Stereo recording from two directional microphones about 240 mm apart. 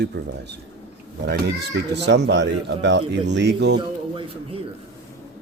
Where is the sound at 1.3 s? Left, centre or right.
Right.